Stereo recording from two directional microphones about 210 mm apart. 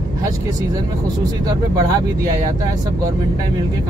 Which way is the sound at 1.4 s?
20° right (ahead or behind).